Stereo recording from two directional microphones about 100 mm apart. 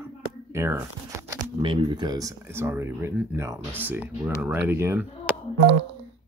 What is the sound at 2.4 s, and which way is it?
Speech, 25° right (ahead or behind).